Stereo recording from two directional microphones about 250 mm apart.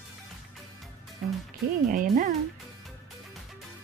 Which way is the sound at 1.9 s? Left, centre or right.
Right.